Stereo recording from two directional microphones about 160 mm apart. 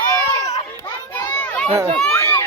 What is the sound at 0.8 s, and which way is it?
Children playing, 15° left (ahead or behind).